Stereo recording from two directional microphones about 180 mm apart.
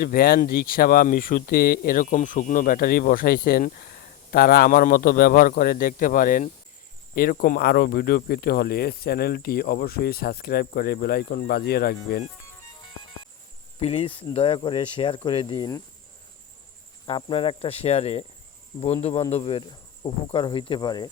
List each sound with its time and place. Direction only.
0.0 s speech: 55° left (ahead or behind)
13.7 s cricket: 35° left (ahead or behind)
14.3 s speech: 30° left (ahead or behind)
17.1 s cricket: 30° left (ahead or behind)
19.3 s speech: 35° left (ahead or behind)